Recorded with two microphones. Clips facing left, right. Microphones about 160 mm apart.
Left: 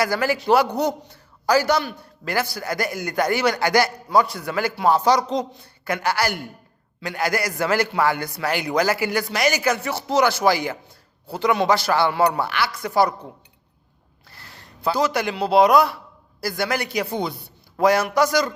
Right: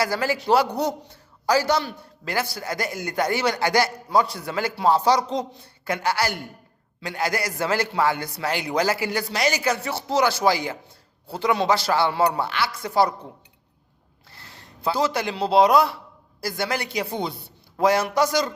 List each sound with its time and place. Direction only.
0.0 s a man's voice: 30° right (ahead or behind)
14.3 s a man's voice: 25° right (ahead or behind)